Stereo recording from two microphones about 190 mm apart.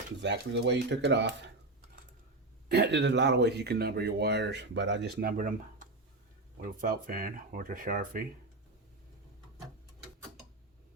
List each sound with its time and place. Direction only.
0.2 s speech: 65° right (ahead or behind)
2.6 s speech: 65° right (ahead or behind); by 8.2 s 45° right (ahead or behind)